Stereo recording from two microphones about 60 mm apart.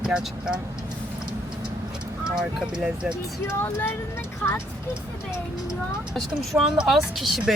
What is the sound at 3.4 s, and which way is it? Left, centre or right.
Speech, left.